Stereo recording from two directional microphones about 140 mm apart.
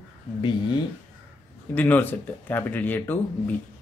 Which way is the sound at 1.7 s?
10° left (ahead or behind).